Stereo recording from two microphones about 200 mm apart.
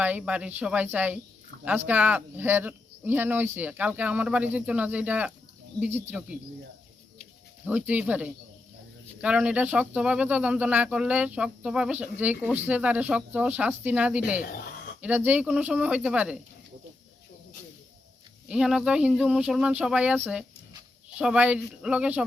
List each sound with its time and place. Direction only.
0.0 s speech: 5° right (ahead or behind)
7.6 s speech: 5° right (ahead or behind)
18.4 s speech: 5° right (ahead or behind)